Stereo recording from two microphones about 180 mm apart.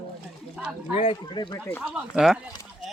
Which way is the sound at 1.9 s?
5° right (ahead or behind).